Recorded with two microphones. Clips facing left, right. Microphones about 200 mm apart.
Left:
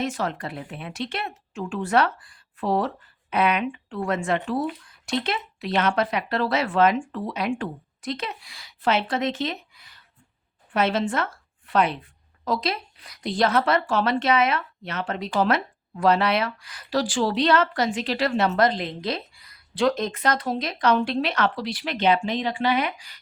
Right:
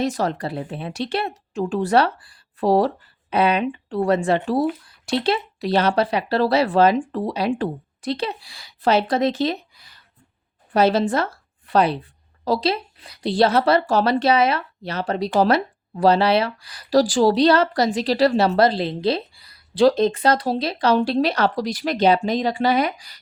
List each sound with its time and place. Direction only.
0.0 s a woman's voice: 40° right (ahead or behind)